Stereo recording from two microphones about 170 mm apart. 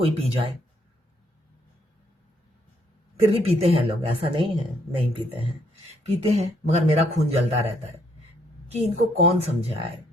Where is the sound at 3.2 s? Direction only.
35° right (ahead or behind).